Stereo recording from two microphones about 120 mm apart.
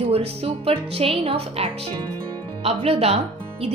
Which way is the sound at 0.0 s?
55° right (ahead or behind).